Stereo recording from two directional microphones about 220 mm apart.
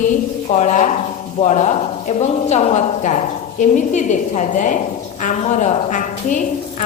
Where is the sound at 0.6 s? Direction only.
35° left (ahead or behind).